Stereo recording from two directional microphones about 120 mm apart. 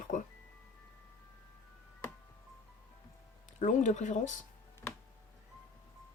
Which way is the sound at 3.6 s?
85° left.